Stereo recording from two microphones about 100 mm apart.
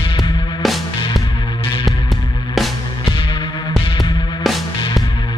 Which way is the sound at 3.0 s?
55° left (ahead or behind).